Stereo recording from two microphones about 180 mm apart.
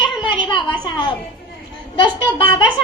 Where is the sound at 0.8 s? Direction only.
25° left (ahead or behind).